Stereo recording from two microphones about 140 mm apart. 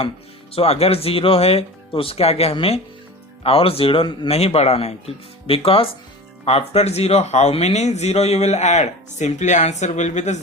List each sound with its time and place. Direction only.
0.5 s speech: 45° left (ahead or behind)